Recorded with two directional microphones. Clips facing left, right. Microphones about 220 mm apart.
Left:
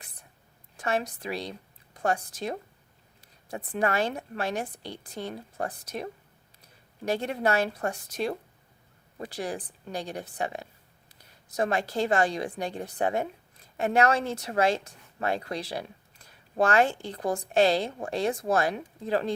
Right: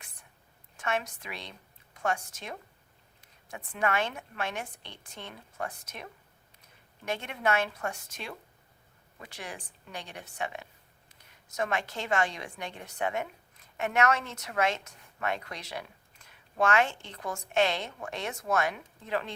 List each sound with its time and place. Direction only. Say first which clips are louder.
0.8 s a woman's voice: left 4 dB; 35° left (ahead or behind)